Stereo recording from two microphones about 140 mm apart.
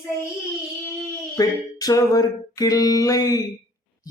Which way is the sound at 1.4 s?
25° left (ahead or behind).